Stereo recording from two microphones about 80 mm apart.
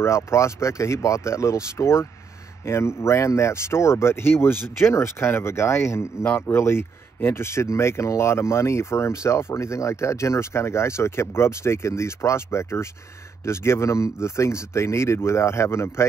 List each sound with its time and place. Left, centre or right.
0.0 s speech: left